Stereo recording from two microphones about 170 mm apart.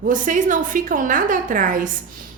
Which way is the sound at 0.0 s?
50° right (ahead or behind).